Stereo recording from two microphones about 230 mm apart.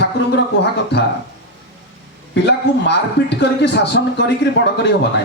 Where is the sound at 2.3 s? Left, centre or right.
Left.